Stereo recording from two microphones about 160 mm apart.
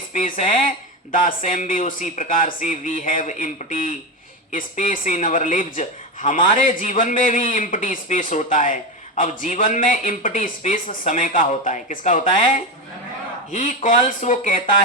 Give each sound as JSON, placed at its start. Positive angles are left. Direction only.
{"t": 0.1, "sound": "speech", "side_deg": 60}